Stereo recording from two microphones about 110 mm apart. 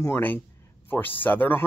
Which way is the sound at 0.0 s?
20° left (ahead or behind).